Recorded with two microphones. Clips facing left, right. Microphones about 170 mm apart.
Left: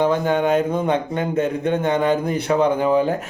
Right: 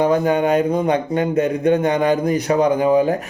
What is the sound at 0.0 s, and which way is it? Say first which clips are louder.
Speech: right 2 dB; 45° right (ahead or behind).